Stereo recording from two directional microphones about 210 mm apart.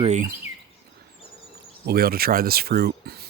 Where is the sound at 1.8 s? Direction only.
45° right (ahead or behind).